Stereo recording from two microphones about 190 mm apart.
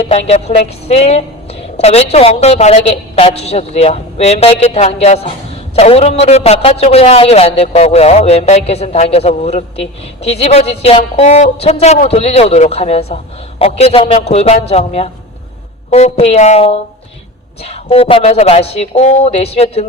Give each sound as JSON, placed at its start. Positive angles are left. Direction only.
{"t": 0.1, "sound": "a man's voice", "side_deg": 35}